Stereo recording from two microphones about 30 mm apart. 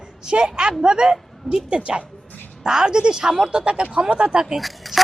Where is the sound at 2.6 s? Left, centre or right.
Right.